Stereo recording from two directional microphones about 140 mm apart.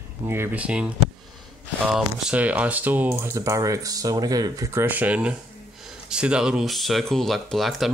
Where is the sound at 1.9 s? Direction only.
5° right (ahead or behind); by 4.8 s 25° right (ahead or behind).